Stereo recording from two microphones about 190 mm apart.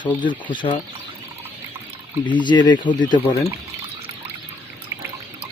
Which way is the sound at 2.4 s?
25° left (ahead or behind).